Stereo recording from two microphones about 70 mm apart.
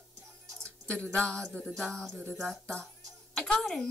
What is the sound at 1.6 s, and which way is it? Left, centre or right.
Speech, centre.